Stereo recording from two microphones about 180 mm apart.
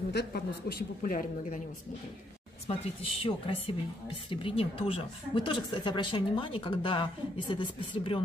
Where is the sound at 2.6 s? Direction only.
30° left (ahead or behind).